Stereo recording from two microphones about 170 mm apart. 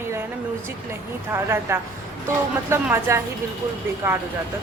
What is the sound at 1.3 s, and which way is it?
A woman's voice, 15° right (ahead or behind).